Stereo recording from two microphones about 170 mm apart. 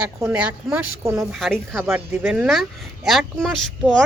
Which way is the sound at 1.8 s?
10° right (ahead or behind).